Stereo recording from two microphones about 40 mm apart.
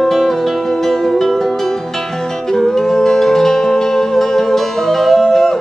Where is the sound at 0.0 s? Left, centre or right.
Centre.